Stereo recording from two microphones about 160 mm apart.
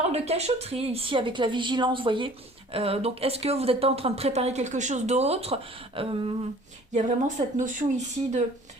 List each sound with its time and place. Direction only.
0.0 s speech: 40° right (ahead or behind)
6.9 s speech: 50° right (ahead or behind)